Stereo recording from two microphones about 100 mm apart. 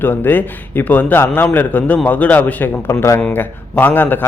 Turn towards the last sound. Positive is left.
turn(degrees=20)  # may be behind; listen again after turning